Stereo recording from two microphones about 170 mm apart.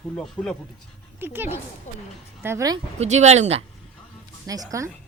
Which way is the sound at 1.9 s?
45° left (ahead or behind).